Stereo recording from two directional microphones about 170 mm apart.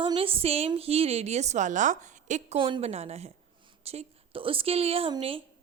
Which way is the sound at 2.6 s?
30° right (ahead or behind).